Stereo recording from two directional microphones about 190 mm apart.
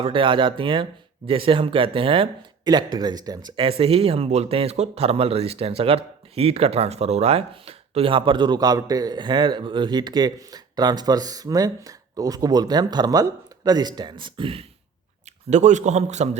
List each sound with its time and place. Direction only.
0.0 s a man's voice: 25° right (ahead or behind)